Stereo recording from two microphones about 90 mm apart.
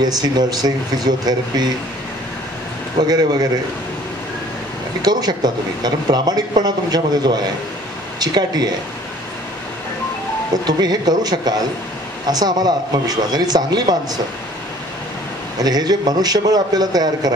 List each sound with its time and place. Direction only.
0.0 s speech: 50° right (ahead or behind)
3.0 s speech: 50° right (ahead or behind)
5.0 s speech: 50° right (ahead or behind)
10.5 s speech: 50° right (ahead or behind)
15.6 s speech: 50° right (ahead or behind)